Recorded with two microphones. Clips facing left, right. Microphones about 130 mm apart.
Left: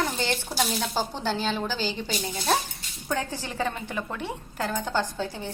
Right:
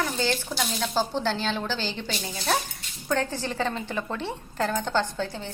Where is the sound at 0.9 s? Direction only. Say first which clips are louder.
Right 5 dB; 10° left (ahead or behind).